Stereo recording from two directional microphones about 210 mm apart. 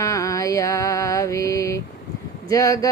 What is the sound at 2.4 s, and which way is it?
Speech, 15° left (ahead or behind).